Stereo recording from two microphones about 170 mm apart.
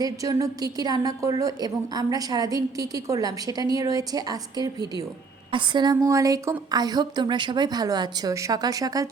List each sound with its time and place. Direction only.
0.0 s a woman's voice: 20° right (ahead or behind)